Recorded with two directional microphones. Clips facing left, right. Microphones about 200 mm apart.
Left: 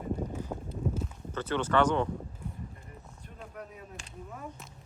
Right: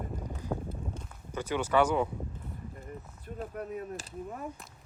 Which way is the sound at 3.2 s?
40° right (ahead or behind).